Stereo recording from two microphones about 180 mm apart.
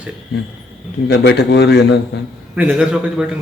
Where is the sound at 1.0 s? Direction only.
65° left (ahead or behind).